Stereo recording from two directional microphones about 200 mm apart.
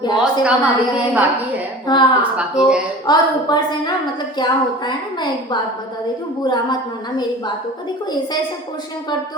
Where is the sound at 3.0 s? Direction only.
20° left (ahead or behind).